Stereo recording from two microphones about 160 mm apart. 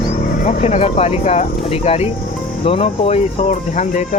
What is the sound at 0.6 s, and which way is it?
Speech, 45° left (ahead or behind).